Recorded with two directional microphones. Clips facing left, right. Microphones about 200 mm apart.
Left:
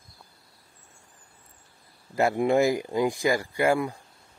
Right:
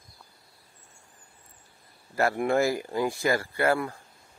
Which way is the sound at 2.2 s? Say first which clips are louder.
Left 2 dB; 15° left (ahead or behind).